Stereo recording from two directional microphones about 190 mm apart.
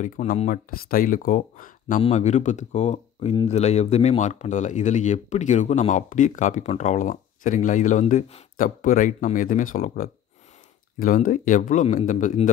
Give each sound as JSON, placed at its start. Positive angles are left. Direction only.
{"t": 0.0, "sound": "speech", "side_deg": 40}